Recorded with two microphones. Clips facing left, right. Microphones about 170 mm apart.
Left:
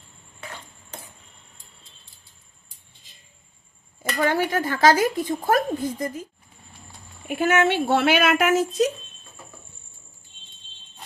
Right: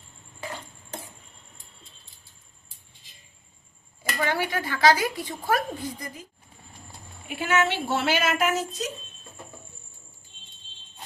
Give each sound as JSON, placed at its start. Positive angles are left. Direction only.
{"t": 4.2, "sound": "speech", "side_deg": 45}
{"t": 7.3, "sound": "speech", "side_deg": 50}